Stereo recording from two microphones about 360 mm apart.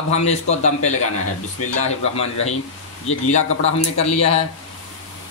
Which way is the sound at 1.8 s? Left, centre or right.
Centre.